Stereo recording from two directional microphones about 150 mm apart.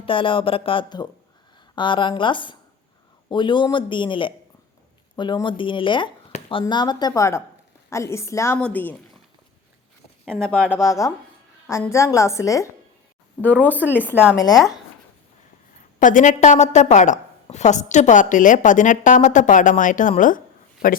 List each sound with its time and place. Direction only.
0.0 s a woman's voice: 35° left (ahead or behind); by 9.0 s 10° left (ahead or behind)
10.2 s speech: 5° left (ahead or behind)
10.8 s a woman's voice: 20° left (ahead or behind)
13.4 s a woman's voice: 10° left (ahead or behind)
13.7 s speech: 10° right (ahead or behind)
16.0 s a woman's voice: 60° left (ahead or behind)